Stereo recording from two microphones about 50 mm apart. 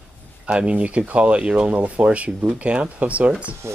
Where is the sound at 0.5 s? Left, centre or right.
Right.